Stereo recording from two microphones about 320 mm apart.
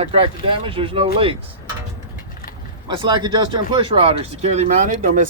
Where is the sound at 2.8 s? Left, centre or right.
Centre.